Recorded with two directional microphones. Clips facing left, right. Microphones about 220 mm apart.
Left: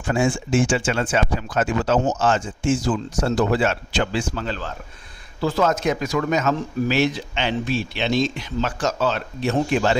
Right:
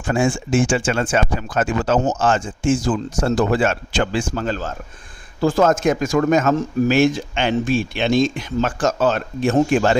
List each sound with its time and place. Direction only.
0.1 s speech: 50° right (ahead or behind)